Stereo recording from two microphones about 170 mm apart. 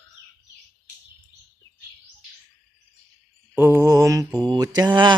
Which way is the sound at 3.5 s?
15° right (ahead or behind).